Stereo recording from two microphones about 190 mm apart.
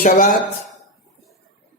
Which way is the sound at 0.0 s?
45° left (ahead or behind).